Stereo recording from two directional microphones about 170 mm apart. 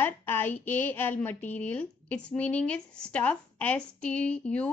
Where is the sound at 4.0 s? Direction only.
45° left (ahead or behind).